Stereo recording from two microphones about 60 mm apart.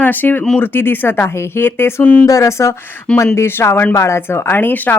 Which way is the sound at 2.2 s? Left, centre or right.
Left.